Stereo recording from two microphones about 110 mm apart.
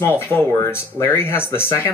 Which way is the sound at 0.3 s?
25° left (ahead or behind).